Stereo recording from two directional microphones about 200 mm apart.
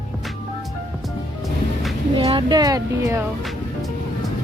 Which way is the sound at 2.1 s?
25° right (ahead or behind).